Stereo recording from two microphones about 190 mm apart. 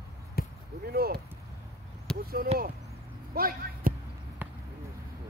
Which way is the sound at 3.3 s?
50° right (ahead or behind).